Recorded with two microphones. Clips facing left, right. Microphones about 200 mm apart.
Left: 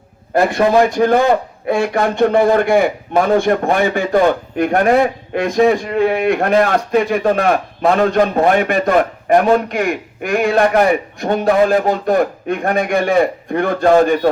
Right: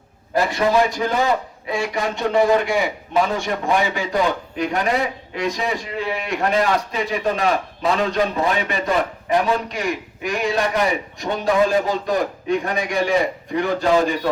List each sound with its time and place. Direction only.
0.3 s a man's voice: 55° left (ahead or behind)